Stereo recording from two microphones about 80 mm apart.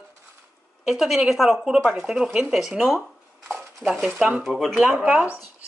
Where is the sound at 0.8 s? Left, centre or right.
Centre.